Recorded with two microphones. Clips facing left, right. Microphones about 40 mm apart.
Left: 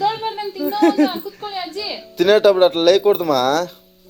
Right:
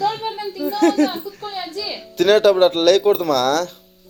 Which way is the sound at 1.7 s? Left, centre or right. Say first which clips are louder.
Left 1 dB; centre.